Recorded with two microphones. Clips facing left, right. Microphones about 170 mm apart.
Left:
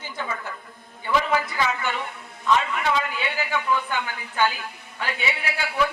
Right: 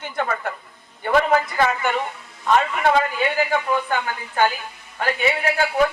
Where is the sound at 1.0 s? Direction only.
55° right (ahead or behind).